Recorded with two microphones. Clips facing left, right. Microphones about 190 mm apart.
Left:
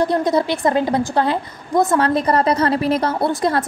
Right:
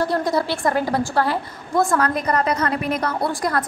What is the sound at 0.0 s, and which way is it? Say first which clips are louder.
A woman's voice: left 4 dB; 20° left (ahead or behind).